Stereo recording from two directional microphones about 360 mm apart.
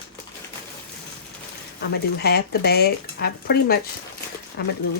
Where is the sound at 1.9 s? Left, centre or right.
Left.